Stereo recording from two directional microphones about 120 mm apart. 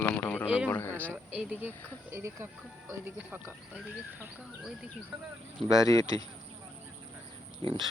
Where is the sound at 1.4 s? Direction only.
15° right (ahead or behind).